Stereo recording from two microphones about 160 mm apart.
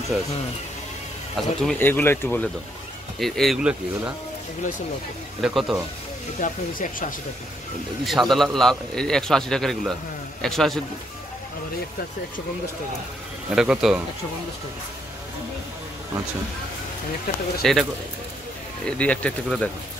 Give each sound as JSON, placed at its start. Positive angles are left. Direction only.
{"t": 1.3, "sound": "a man's voice", "side_deg": 0}
{"t": 1.8, "sound": "speech", "side_deg": 15}
{"t": 3.2, "sound": "a man's voice", "side_deg": 0}
{"t": 5.4, "sound": "a man's voice", "side_deg": 0}
{"t": 6.4, "sound": "speech", "side_deg": 55}
{"t": 8.0, "sound": "a man's voice", "side_deg": 0}
{"t": 13.6, "sound": "a man's voice", "side_deg": -5}
{"t": 17.6, "sound": "a man's voice", "side_deg": 0}
{"t": 18.9, "sound": "speech", "side_deg": 10}